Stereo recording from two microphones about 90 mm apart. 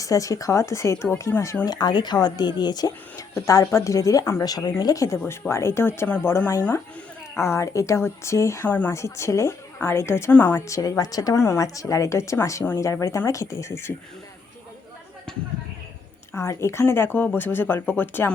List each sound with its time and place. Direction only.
0.0 s speech: 40° left (ahead or behind)
1.6 s speech: 50° left (ahead or behind)
3.3 s speech: 35° left (ahead or behind)
8.6 s speech: 15° left (ahead or behind)
8.9 s speech: 30° left (ahead or behind)
10.7 s speech: 40° left (ahead or behind)
15.3 s a sound: 10° left (ahead or behind)
16.3 s speech: 30° left (ahead or behind)